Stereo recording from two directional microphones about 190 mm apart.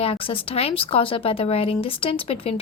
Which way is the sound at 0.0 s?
30° left (ahead or behind).